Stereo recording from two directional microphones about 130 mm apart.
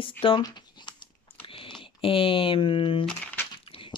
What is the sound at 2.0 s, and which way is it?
Speech, 45° left (ahead or behind).